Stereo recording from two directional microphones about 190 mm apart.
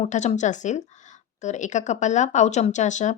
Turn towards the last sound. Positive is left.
turn(degrees=40)  # may be behind; listen again after turning